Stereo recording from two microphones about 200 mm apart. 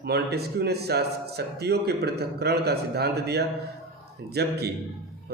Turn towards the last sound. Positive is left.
turn(degrees=-55)  # may be behind; listen again after turning